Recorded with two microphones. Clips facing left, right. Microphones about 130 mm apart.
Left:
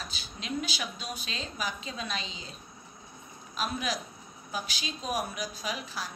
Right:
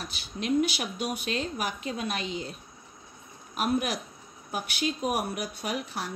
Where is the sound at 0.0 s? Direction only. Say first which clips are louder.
Right 7 dB; 60° right (ahead or behind).